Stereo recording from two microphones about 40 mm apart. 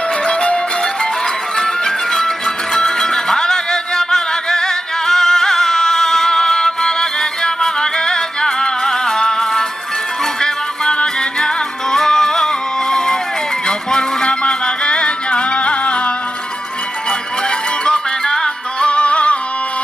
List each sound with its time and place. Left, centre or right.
0.2 s music: left
1.6 s music: centre; by 16.1 s left
17.8 s music: left